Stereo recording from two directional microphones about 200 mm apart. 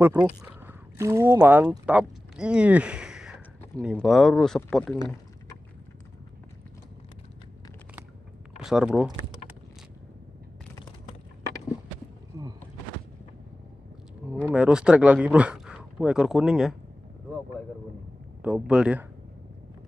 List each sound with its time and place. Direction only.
0.0 s speech: 10° right (ahead or behind)
8.6 s speech: centre (ahead or behind)
12.3 s a sound: 20° right (ahead or behind)
14.5 s speech: 5° right (ahead or behind)
18.4 s speech: 5° right (ahead or behind)